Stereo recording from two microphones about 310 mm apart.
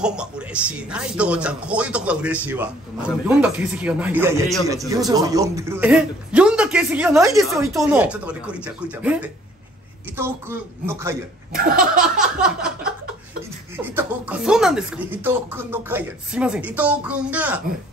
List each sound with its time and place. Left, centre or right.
0.0 s speech: centre
11.5 s laughter: right
12.2 s a sound: centre
13.7 s speech: centre